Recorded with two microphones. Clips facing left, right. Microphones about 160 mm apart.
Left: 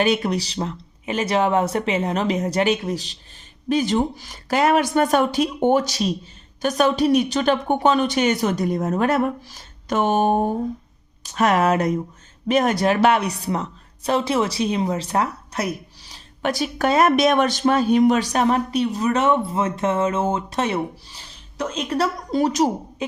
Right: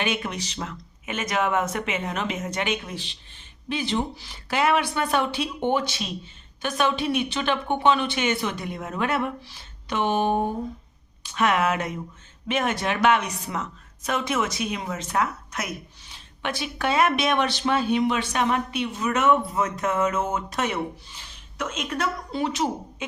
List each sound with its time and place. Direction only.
0.0 s a woman's voice: 35° left (ahead or behind)